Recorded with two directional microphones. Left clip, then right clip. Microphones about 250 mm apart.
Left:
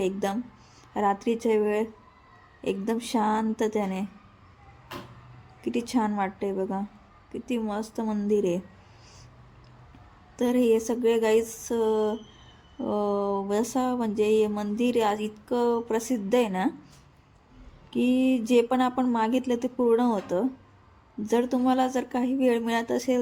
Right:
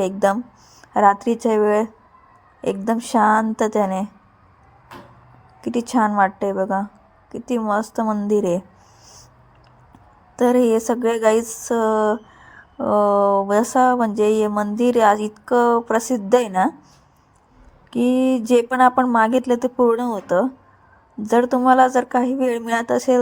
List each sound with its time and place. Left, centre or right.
0.0 s speech: right
5.6 s speech: right
10.3 s speech: right
17.9 s speech: centre